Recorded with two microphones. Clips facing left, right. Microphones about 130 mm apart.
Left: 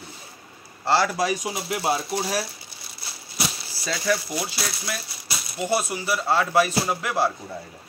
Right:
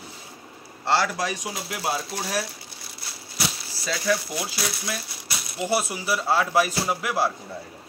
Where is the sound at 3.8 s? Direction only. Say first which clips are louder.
Even; centre (ahead or behind).